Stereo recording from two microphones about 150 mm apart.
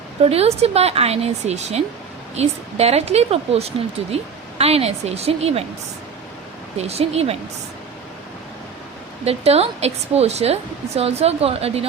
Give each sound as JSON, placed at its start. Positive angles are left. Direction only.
{"t": 0.2, "sound": "a woman's voice", "side_deg": -40}
{"t": 6.7, "sound": "a woman's voice", "side_deg": -45}
{"t": 9.2, "sound": "a woman's voice", "side_deg": -45}